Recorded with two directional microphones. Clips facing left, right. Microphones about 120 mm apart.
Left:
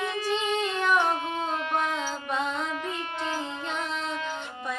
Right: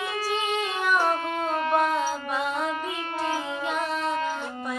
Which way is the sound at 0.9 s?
45° right (ahead or behind).